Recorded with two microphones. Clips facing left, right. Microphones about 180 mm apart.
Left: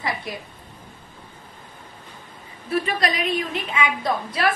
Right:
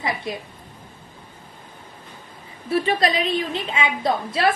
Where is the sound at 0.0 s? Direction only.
25° right (ahead or behind).